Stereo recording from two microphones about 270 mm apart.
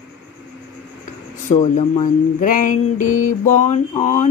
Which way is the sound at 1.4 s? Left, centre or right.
Left.